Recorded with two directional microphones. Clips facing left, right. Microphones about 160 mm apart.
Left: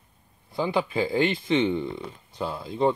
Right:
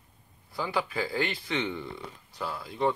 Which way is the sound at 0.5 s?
20° left (ahead or behind).